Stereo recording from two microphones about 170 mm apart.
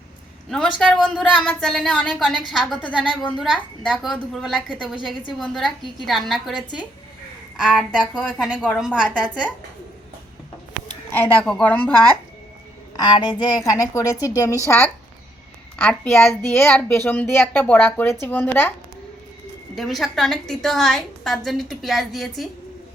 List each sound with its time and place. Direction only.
0.5 s a woman's voice: centre (ahead or behind)
8.4 s a woman's voice: 5° right (ahead or behind)
8.6 s a woman's voice: 5° left (ahead or behind)
11.1 s speech: 10° left (ahead or behind)
13.0 s speech: 25° left (ahead or behind)
19.7 s a woman's voice: centre (ahead or behind)